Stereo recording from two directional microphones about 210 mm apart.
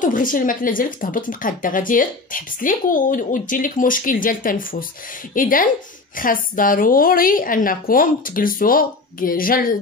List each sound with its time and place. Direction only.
0.0 s a woman's voice: 40° left (ahead or behind)